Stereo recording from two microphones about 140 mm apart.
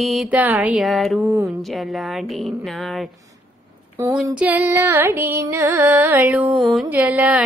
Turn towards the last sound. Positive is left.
turn(degrees=-10)  # may be behind; listen again after turning